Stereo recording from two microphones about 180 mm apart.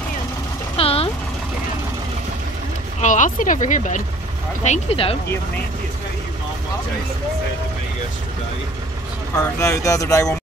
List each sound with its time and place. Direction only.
0.7 s vehicle: 30° left (ahead or behind)
3.0 s speech: 45° left (ahead or behind)
4.6 s speech: 30° left (ahead or behind)
9.6 s speech: 15° left (ahead or behind)